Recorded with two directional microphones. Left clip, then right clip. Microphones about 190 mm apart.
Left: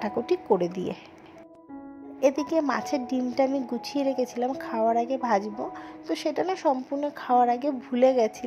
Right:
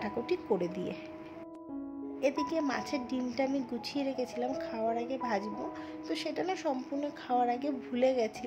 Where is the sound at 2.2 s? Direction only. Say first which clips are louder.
Left 8 dB; 30° left (ahead or behind).